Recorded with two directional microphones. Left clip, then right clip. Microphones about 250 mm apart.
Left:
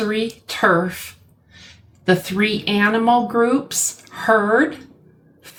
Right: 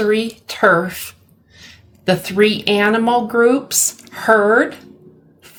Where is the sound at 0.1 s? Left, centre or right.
Right.